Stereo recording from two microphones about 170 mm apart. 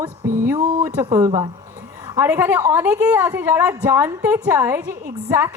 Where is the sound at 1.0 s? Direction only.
20° right (ahead or behind).